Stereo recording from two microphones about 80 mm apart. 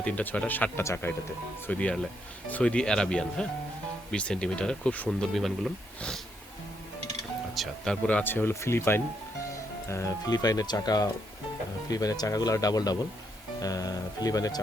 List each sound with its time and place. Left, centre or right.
0.0 s speech: centre
5.0 s speech: centre
7.5 s speech: centre
8.0 s speech: left
9.9 s speech: left